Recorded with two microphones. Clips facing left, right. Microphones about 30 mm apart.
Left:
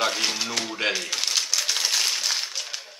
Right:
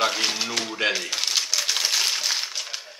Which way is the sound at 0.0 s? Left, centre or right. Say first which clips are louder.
Right 1 dB; centre.